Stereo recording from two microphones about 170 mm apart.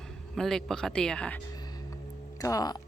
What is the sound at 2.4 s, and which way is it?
Speech, 20° left (ahead or behind).